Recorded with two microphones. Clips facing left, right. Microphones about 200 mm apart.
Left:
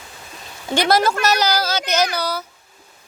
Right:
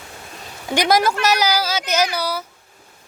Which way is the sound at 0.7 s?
15° right (ahead or behind).